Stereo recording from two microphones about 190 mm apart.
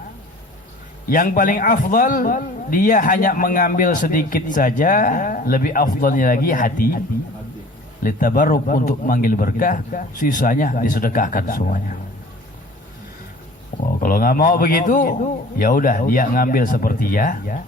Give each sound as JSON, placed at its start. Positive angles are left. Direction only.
{"t": 1.1, "sound": "speech", "side_deg": 45}
{"t": 8.0, "sound": "speech", "side_deg": 45}
{"t": 14.0, "sound": "speech", "side_deg": 50}